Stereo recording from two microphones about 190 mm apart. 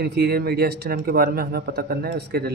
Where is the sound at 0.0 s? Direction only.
55° right (ahead or behind).